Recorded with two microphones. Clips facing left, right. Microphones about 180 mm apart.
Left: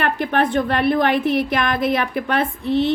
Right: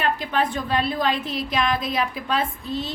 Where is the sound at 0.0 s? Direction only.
65° left (ahead or behind).